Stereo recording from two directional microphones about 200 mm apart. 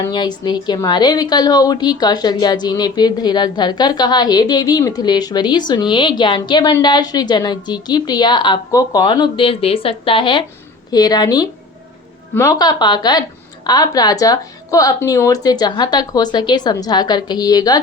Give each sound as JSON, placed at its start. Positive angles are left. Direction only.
{"t": 0.0, "sound": "a woman's voice", "side_deg": 20}